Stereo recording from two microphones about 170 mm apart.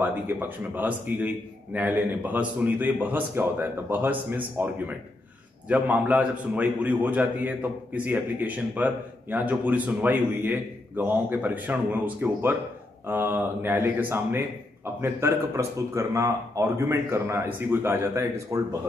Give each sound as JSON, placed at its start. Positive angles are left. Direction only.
{"t": 0.0, "sound": "a man's voice", "side_deg": -10}